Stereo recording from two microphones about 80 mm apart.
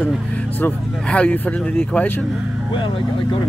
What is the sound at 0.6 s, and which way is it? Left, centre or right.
Speech, centre.